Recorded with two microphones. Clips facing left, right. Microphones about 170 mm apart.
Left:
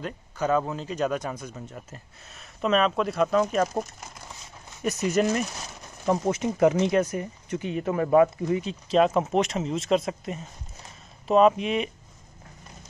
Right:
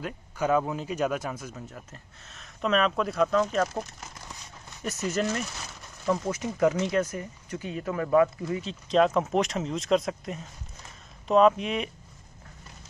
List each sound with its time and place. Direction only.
0.0 s speech: 10° right (ahead or behind)
3.3 s speech: 10° left (ahead or behind)
4.8 s speech: 15° left (ahead or behind)
8.5 s speech: 15° left (ahead or behind)
8.8 s speech: 5° left (ahead or behind)